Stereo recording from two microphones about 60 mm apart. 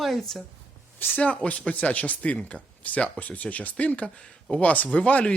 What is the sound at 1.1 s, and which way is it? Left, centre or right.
Speech, left.